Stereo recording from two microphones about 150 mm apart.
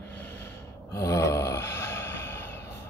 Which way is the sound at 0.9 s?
20° left (ahead or behind).